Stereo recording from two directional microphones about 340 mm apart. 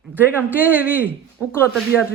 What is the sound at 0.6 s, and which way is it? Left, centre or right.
Speech, centre.